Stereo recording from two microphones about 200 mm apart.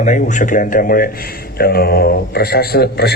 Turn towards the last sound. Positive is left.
turn(degrees=55)  # may be behind; listen again after turning